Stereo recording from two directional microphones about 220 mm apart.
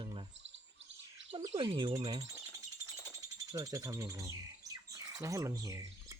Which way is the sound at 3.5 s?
15° right (ahead or behind).